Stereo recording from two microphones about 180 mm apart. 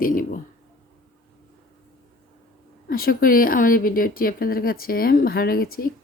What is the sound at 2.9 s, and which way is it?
Speech, 55° left (ahead or behind).